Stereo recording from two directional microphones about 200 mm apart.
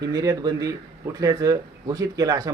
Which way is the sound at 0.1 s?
20° right (ahead or behind).